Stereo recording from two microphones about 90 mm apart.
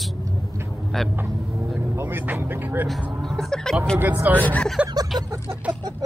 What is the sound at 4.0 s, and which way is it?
Speech, 20° right (ahead or behind).